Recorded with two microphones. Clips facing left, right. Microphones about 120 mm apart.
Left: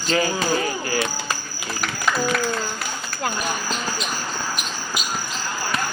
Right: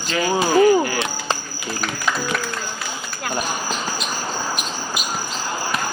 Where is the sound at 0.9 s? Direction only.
25° right (ahead or behind).